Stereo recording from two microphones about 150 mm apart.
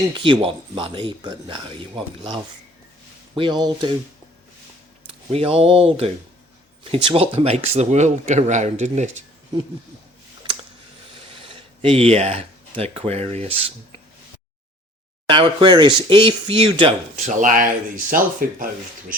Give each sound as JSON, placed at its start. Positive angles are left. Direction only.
{"t": 0.1, "sound": "speech", "side_deg": -35}
{"t": 5.3, "sound": "speech", "side_deg": -40}
{"t": 11.4, "sound": "speech", "side_deg": -40}
{"t": 15.3, "sound": "speech", "side_deg": -35}
{"t": 17.2, "sound": "speech", "side_deg": -60}